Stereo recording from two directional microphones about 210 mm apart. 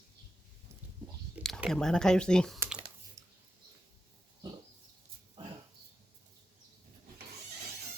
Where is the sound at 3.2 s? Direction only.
15° right (ahead or behind).